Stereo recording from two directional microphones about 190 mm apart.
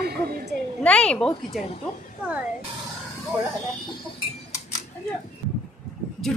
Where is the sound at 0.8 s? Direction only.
5° left (ahead or behind).